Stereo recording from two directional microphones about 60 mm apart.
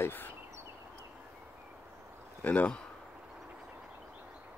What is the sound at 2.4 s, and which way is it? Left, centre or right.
Speech, left.